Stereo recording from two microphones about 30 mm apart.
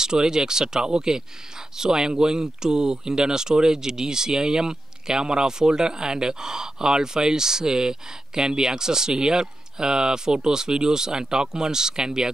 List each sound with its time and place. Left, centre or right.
0.0 s speech: right